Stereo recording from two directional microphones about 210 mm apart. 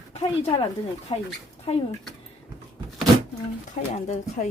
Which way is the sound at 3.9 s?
35° left (ahead or behind).